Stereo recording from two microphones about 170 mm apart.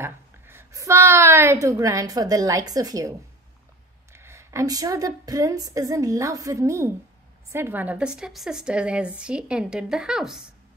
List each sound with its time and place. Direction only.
0.0 s a woman's voice: 15° right (ahead or behind)